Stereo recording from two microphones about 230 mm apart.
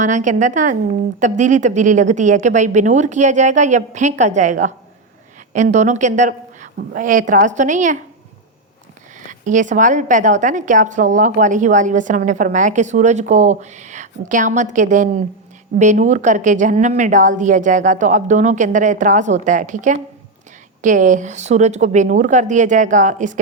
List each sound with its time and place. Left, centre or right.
0.0 s a woman's voice: right
5.7 s a woman's voice: right
9.4 s a woman's voice: right